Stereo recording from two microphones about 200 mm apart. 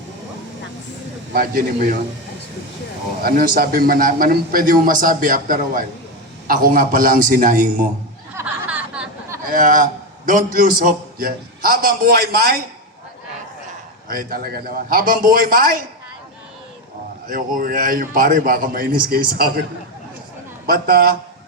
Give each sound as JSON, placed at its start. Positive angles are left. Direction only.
{"t": 1.3, "sound": "a man's voice", "side_deg": -45}
{"t": 3.2, "sound": "a man's voice", "side_deg": -45}
{"t": 8.4, "sound": "a sound", "side_deg": -10}
{"t": 9.5, "sound": "a man's voice", "side_deg": -40}
{"t": 14.1, "sound": "a man's voice", "side_deg": -45}
{"t": 17.2, "sound": "a man's voice", "side_deg": -45}
{"t": 20.7, "sound": "a man's voice", "side_deg": -50}